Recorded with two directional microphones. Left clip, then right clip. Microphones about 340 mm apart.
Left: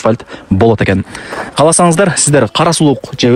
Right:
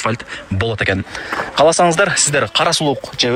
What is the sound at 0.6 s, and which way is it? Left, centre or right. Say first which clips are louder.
A man's voice: left 7 dB; centre.